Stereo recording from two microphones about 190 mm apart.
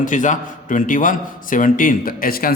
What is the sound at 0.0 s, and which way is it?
A man's voice, 40° left (ahead or behind).